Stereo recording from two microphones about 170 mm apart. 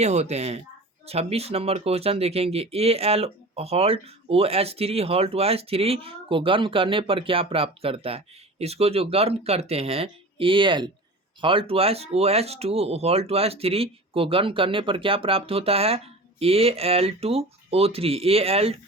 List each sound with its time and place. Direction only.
0.0 s speech: 40° right (ahead or behind)